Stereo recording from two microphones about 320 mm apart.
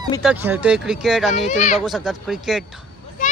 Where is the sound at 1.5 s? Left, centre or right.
Left.